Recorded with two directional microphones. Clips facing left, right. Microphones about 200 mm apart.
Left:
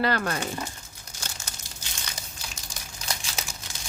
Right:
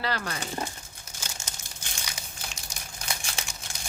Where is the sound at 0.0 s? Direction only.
55° left (ahead or behind).